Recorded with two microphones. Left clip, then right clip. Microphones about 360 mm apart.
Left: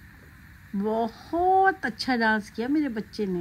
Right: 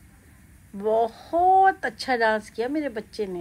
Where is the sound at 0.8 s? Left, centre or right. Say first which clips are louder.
Right 5 dB; centre.